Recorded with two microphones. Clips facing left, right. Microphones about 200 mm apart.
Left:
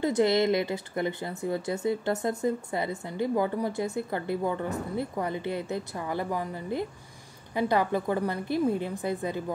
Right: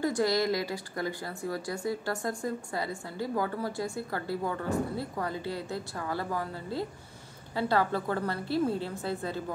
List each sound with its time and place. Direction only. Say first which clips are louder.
0.0 s a woman's voice: left 4 dB; 20° left (ahead or behind)